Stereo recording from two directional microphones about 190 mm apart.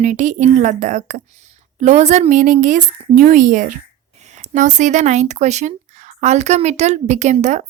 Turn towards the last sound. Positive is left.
turn(degrees=-40)  # may be behind; listen again after turning